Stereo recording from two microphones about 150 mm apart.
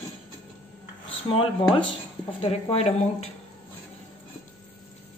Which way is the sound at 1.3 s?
35° left (ahead or behind).